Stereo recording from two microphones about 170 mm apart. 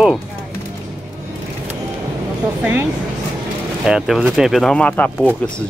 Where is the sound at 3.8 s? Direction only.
Centre (ahead or behind).